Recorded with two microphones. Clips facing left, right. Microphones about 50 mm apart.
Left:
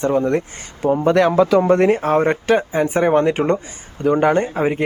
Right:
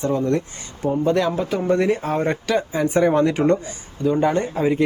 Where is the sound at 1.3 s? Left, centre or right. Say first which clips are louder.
Left 9 dB; left.